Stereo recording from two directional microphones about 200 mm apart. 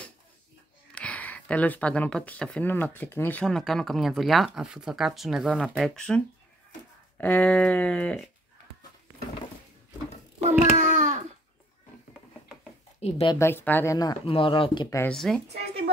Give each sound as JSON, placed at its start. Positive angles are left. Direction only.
{"t": 0.9, "sound": "speech", "side_deg": 5}
{"t": 10.6, "sound": "a sound", "side_deg": -35}
{"t": 13.0, "sound": "a woman's voice", "side_deg": 30}
{"t": 13.4, "sound": "speech", "side_deg": 10}
{"t": 15.1, "sound": "speech", "side_deg": 0}